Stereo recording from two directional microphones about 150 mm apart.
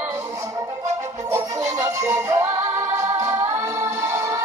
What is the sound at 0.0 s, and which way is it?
Music, 15° right (ahead or behind).